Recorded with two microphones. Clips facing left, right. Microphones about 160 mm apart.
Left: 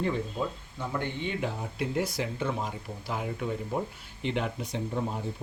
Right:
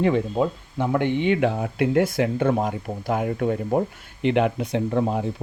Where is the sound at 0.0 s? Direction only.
75° right (ahead or behind).